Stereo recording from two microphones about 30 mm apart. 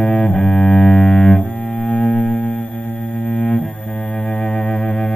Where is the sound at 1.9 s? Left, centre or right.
Left.